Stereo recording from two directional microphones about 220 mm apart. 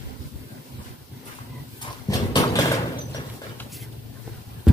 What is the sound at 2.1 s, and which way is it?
Dog, 15° left (ahead or behind).